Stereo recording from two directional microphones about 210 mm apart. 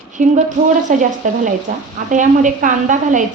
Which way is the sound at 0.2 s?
35° right (ahead or behind).